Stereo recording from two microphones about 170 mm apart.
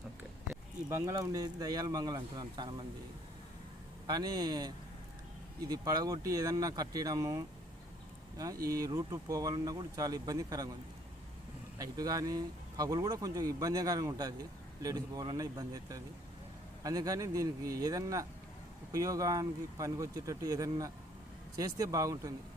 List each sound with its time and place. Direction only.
0.9 s speech: 20° right (ahead or behind)
4.0 s speech: 25° right (ahead or behind)
8.6 s speech: 20° right (ahead or behind)
11.8 s speech: 20° right (ahead or behind)